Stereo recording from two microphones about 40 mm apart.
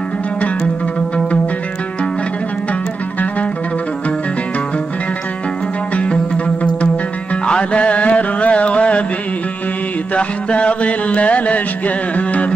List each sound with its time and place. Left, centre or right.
5.9 s music: left
10.1 s music: left
12.2 s carnatic music: left